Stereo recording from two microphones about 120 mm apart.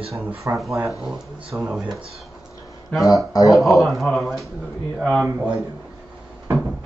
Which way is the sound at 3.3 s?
30° left (ahead or behind).